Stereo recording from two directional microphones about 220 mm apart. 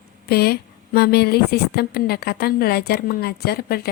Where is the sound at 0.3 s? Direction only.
45° left (ahead or behind).